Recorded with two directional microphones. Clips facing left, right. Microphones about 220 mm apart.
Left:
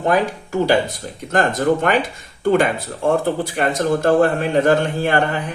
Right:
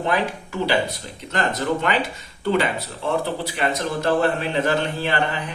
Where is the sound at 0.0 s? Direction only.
45° left (ahead or behind).